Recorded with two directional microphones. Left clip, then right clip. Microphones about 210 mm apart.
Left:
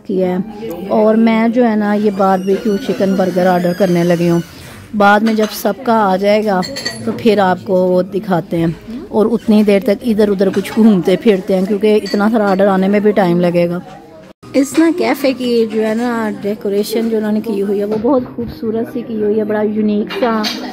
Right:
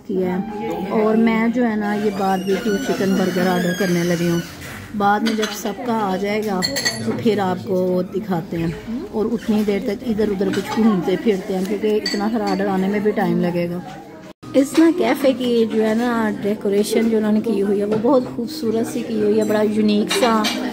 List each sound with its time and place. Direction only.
0.9 s speech: 50° left (ahead or behind)
3.0 s speech: 65° left (ahead or behind)
3.8 s speech: 45° left (ahead or behind)
4.9 s speech: 60° left (ahead or behind)
14.5 s a woman's voice: 25° left (ahead or behind)
19.3 s speech: 30° left (ahead or behind)